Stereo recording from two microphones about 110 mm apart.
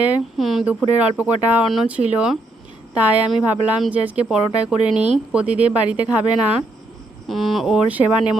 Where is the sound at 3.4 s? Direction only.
15° right (ahead or behind).